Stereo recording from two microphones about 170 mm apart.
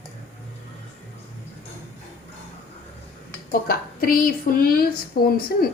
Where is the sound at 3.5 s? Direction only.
55° left (ahead or behind).